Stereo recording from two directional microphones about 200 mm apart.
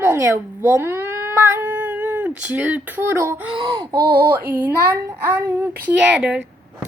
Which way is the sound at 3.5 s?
25° right (ahead or behind).